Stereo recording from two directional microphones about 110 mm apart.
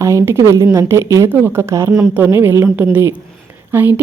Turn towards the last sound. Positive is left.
turn(degrees=-20)  # may be behind; listen again after turning